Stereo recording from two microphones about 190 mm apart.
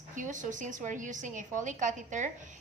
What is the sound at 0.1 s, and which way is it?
A woman's voice, 40° right (ahead or behind).